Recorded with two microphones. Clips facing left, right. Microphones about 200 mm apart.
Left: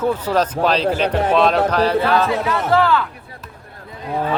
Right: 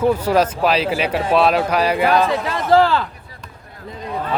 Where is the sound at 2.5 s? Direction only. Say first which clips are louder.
Right 2 dB; 30° right (ahead or behind).